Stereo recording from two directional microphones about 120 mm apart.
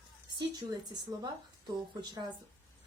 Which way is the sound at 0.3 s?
35° right (ahead or behind).